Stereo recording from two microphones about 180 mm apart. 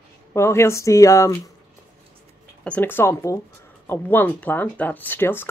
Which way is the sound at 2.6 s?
10° left (ahead or behind).